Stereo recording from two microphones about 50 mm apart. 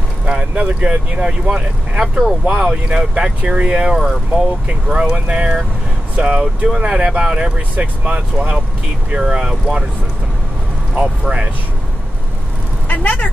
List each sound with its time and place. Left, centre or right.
0.2 s speech: centre
9.2 s speech: centre
11.0 s speech: centre
12.8 s vehicle: left